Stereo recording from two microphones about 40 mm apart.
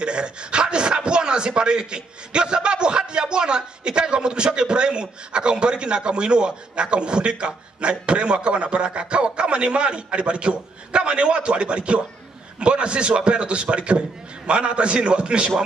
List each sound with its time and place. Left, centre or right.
0.0 s speech: right